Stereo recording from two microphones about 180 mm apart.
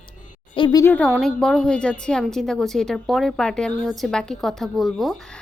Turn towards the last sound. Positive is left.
turn(degrees=0)  # may be behind; listen again after turning